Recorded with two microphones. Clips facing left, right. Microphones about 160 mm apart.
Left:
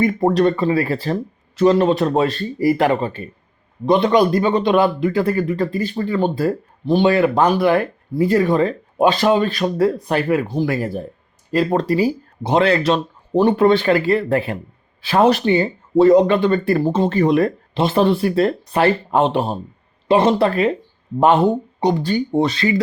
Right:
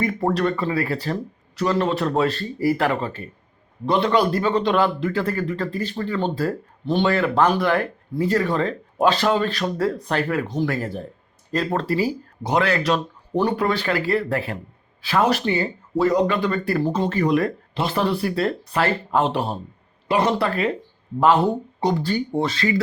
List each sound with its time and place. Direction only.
0.0 s speech: 20° left (ahead or behind)